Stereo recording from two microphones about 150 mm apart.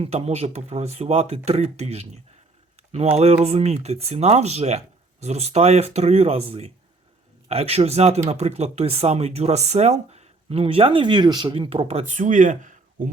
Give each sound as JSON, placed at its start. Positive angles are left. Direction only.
{"t": 0.0, "sound": "speech", "side_deg": -45}